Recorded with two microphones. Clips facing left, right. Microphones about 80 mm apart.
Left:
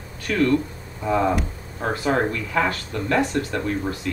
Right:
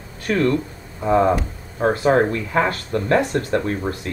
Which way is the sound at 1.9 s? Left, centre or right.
Right.